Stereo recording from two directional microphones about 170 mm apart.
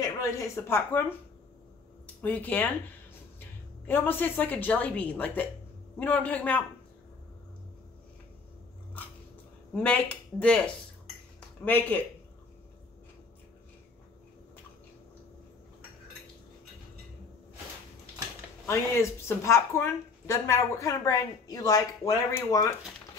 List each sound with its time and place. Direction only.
0.0 s speech: 20° left (ahead or behind)
2.2 s a woman's voice: 10° left (ahead or behind)
9.8 s speech: 5° left (ahead or behind)
18.7 s speech: 15° left (ahead or behind)